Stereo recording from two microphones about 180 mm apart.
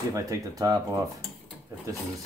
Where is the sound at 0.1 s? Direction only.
20° right (ahead or behind).